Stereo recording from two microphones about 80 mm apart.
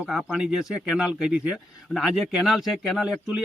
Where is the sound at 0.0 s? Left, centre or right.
Centre.